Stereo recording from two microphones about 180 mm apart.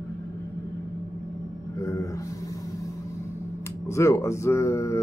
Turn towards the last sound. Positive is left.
turn(degrees=15)  # may be behind; listen again after turning